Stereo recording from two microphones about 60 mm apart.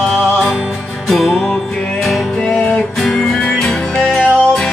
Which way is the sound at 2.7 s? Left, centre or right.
Centre.